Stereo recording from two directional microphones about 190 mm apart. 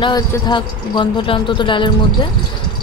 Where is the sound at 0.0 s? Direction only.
25° left (ahead or behind).